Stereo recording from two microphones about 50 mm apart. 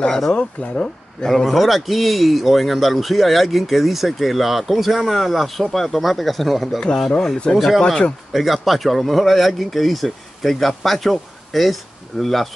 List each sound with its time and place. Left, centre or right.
0.0 s speech: centre
1.2 s a man's voice: centre
7.1 s speech: centre
7.5 s a man's voice: centre
7.8 s speech: centre
8.3 s a man's voice: centre